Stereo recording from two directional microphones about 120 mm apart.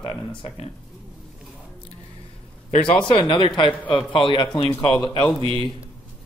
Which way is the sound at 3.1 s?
45° left (ahead or behind).